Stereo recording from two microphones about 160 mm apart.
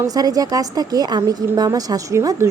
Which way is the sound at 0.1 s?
25° right (ahead or behind).